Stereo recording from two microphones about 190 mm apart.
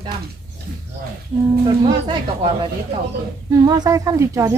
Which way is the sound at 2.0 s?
25° right (ahead or behind).